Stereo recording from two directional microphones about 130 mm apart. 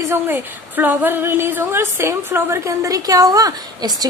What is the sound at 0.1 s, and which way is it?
A woman's voice, 15° right (ahead or behind).